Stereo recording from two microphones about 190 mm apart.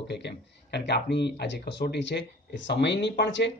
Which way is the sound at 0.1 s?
60° left (ahead or behind).